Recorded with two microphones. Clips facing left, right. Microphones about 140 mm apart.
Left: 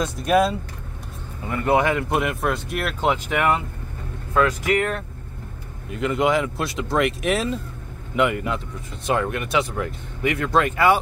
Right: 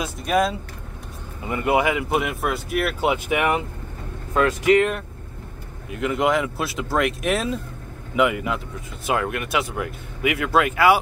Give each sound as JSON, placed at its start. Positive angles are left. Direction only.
{"t": 0.0, "sound": "speech", "side_deg": 0}
{"t": 1.4, "sound": "speech", "side_deg": -15}
{"t": 4.3, "sound": "speech", "side_deg": -25}
{"t": 5.9, "sound": "speech", "side_deg": 0}